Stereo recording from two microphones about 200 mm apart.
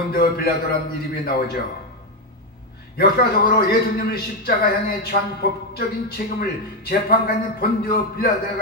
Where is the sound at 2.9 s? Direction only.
50° left (ahead or behind).